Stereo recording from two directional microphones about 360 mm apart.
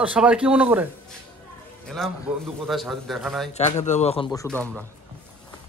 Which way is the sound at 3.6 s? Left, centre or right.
Centre.